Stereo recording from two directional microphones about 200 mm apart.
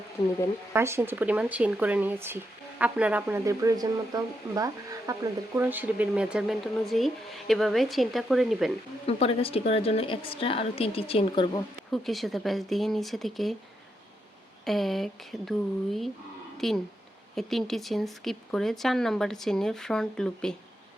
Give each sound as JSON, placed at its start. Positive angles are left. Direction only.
{"t": 0.7, "sound": "speech", "side_deg": -10}
{"t": 9.0, "sound": "a woman's voice", "side_deg": 30}
{"t": 11.9, "sound": "speech", "side_deg": 0}
{"t": 14.6, "sound": "speech", "side_deg": 0}